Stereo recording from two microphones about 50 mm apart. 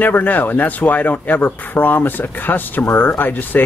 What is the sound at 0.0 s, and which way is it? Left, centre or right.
Speech, left.